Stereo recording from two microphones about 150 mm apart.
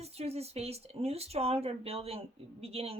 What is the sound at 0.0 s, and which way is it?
Speech, 45° right (ahead or behind).